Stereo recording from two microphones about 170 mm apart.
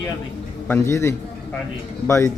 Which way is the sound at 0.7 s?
15° left (ahead or behind).